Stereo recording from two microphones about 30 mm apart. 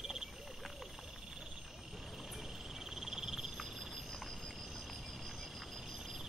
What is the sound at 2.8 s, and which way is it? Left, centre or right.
Frog, centre.